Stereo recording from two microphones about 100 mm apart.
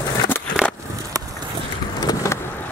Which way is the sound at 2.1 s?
40° left (ahead or behind).